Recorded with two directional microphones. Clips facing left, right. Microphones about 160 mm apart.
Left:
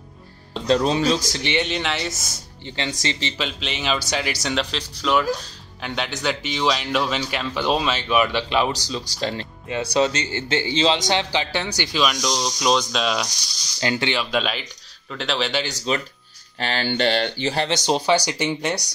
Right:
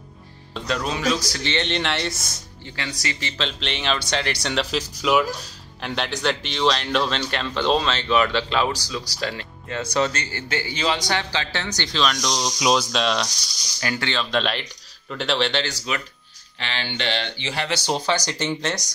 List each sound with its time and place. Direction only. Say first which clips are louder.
0.7 s speech: left 5 dB; 30° left (ahead or behind)
1.4 s speech: left 1 dB; 10° left (ahead or behind)
2.6 s speech: left 4 dB; 25° left (ahead or behind)
3.3 s speech: even; 5° left (ahead or behind)
13.7 s speech: left 3 dB; 20° left (ahead or behind)
14.3 s speech: even; 5° left (ahead or behind)
15.9 s speech: left 7 dB; 30° left (ahead or behind)
16.5 s speech: left 7 dB; 40° left (ahead or behind)
17.6 s speech: left 2 dB; 20° left (ahead or behind)